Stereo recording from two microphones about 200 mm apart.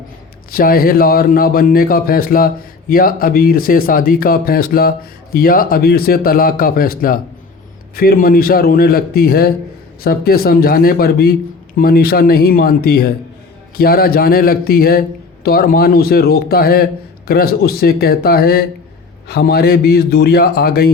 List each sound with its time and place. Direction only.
0.5 s speech: 50° left (ahead or behind)